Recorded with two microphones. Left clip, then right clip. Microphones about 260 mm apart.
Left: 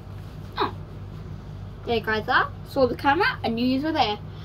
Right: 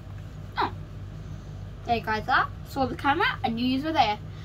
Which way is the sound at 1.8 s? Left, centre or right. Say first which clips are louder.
Left 2 dB; centre.